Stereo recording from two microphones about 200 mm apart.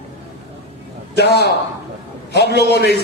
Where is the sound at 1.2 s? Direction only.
55° left (ahead or behind).